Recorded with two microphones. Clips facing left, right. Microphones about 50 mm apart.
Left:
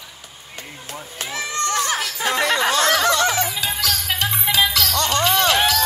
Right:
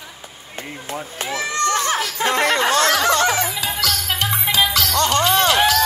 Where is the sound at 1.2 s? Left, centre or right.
Right.